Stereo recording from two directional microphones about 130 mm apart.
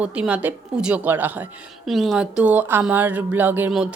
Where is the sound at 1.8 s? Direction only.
Centre (ahead or behind).